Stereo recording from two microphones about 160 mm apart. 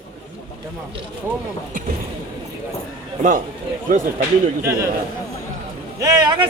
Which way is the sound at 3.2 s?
55° right (ahead or behind).